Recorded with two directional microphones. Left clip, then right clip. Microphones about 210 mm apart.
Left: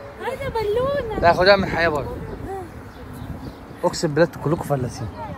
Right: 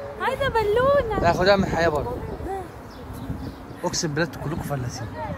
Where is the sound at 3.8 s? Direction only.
5° right (ahead or behind).